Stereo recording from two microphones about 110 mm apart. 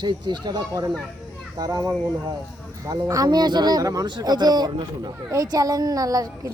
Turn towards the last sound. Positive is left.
turn(degrees=-35)  # may be behind; listen again after turning